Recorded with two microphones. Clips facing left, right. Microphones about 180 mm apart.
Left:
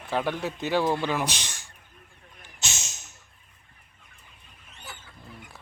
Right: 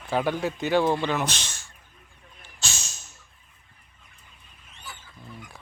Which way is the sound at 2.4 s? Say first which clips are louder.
Even; 20° left (ahead or behind).